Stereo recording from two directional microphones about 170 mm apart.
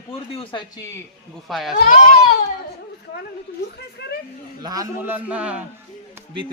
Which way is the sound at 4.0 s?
80° left.